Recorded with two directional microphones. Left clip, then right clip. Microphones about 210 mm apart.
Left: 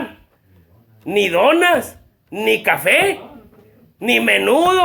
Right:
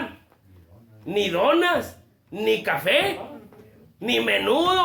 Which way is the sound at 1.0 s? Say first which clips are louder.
Left 7 dB; 35° left (ahead or behind).